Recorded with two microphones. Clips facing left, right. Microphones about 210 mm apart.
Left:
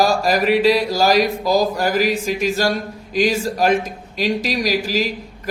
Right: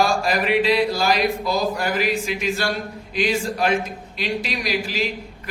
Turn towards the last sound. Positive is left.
turn(degrees=40)  # may be behind; listen again after turning